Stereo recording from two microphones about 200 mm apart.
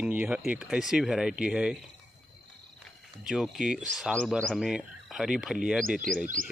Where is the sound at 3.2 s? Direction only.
Centre (ahead or behind).